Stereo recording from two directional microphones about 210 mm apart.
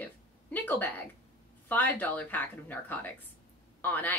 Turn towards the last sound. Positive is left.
turn(degrees=10)  # may be behind; listen again after turning